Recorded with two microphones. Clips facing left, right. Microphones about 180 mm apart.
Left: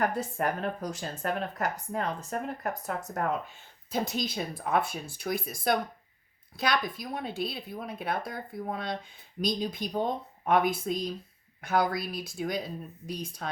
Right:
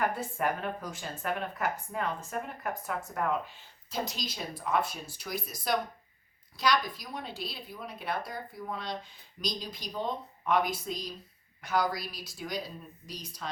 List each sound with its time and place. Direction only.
0.1 s speech: 40° left (ahead or behind)
3.9 s speech: 55° left (ahead or behind)